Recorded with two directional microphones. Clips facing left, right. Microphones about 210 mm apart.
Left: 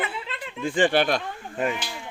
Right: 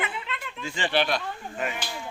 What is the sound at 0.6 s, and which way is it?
Speech, 50° left (ahead or behind).